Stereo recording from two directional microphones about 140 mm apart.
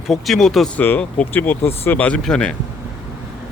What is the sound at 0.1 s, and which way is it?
Speech, centre (ahead or behind).